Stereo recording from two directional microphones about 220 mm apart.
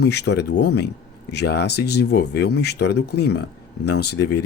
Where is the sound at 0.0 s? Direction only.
50° left (ahead or behind).